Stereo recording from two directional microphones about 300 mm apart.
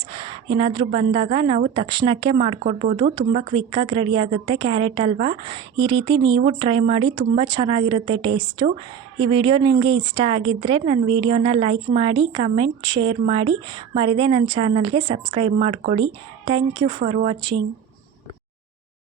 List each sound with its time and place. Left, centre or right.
0.1 s a woman's voice: centre